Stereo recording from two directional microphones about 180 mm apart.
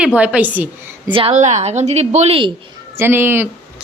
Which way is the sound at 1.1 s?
30° right (ahead or behind).